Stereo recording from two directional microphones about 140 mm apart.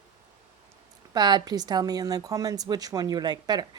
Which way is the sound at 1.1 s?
30° right (ahead or behind).